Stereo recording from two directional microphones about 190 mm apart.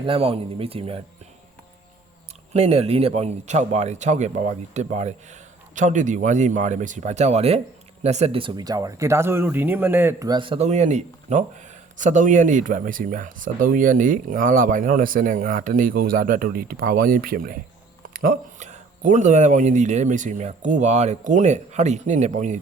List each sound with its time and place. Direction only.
0.0 s a man's voice: 30° right (ahead or behind)
2.5 s a man's voice: 35° right (ahead or behind)